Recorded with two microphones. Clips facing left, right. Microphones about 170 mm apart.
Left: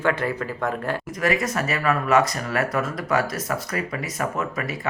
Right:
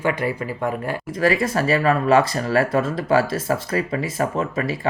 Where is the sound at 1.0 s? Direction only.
30° right (ahead or behind).